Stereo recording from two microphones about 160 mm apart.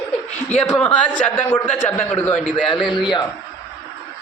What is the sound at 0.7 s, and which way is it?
Speech, 5° left (ahead or behind).